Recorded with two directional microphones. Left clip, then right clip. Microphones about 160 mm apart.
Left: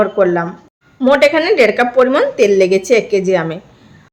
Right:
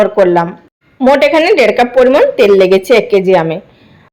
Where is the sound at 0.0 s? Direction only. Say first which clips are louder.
Right 4 dB; 20° right (ahead or behind).